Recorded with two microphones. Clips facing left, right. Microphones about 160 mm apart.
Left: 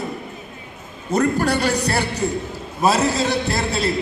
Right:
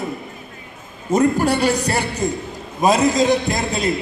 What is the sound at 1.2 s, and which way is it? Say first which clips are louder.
Speech: right 2 dB; 10° right (ahead or behind).